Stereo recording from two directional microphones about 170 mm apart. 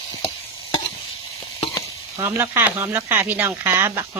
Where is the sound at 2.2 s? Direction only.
15° right (ahead or behind).